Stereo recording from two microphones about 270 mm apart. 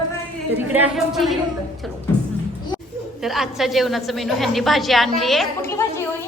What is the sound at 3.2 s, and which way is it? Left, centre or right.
A woman's voice, centre.